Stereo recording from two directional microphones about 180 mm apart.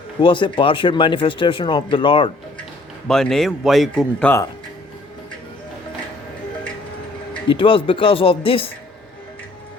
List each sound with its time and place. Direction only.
0.2 s speech: 25° left (ahead or behind)
3.1 s speech: centre (ahead or behind)
7.4 s speech: 30° left (ahead or behind)